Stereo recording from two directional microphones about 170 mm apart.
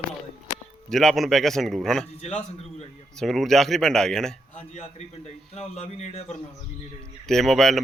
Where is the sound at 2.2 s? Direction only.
35° left (ahead or behind).